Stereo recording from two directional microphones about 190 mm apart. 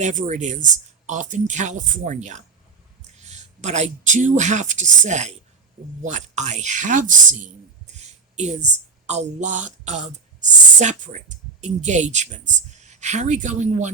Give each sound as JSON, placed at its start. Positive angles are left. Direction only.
{"t": 0.0, "sound": "a woman's voice", "side_deg": -40}